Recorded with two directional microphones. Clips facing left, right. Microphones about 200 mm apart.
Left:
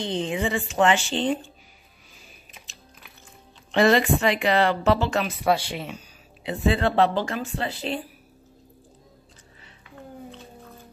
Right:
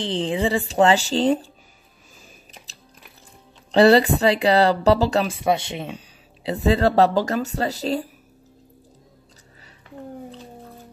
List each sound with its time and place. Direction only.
0.0 s speech: 30° right (ahead or behind)
3.7 s speech: 35° right (ahead or behind)
5.4 s speech: 20° right (ahead or behind); by 8.0 s 40° right (ahead or behind)